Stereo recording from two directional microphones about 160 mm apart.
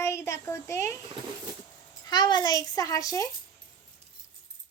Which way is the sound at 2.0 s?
25° left (ahead or behind).